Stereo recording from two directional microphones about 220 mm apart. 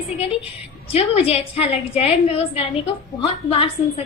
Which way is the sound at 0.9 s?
25° left (ahead or behind).